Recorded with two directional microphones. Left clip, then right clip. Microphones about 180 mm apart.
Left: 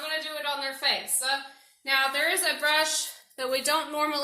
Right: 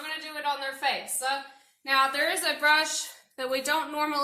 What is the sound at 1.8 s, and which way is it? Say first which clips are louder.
A woman's voice: even; 20° right (ahead or behind).